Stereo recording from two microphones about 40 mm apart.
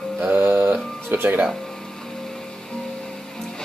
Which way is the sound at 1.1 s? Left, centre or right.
Right.